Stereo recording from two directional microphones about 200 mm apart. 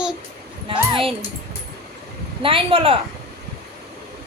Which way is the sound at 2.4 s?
25° right (ahead or behind).